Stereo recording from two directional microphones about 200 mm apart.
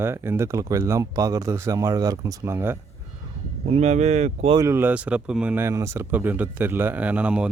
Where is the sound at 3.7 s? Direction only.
35° right (ahead or behind).